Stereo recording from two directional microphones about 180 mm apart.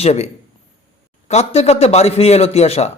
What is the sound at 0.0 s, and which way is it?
Speech, 40° left (ahead or behind).